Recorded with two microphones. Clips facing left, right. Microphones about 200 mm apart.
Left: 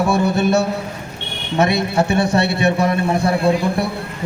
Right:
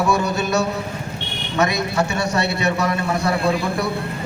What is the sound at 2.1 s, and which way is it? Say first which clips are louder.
A man's voice: left 5 dB; 30° left (ahead or behind).